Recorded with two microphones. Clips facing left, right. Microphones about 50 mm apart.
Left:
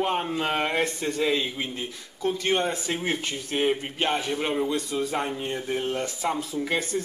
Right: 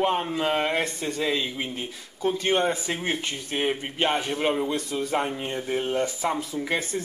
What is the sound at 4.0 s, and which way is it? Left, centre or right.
Speech, right.